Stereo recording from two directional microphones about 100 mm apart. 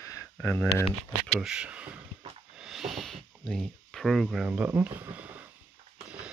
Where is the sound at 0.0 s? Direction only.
25° left (ahead or behind).